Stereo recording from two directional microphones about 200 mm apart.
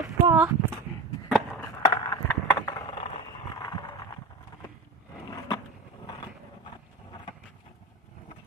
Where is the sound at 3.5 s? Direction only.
20° left (ahead or behind).